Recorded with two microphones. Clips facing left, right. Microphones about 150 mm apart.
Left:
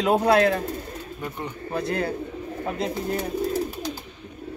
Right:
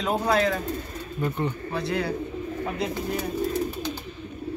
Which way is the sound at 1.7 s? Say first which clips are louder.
Left 6 dB; 50° left (ahead or behind).